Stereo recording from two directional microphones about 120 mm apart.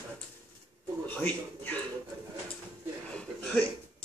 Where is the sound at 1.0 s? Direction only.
15° left (ahead or behind).